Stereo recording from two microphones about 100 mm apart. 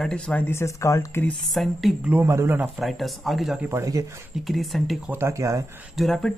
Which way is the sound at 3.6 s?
30° right (ahead or behind).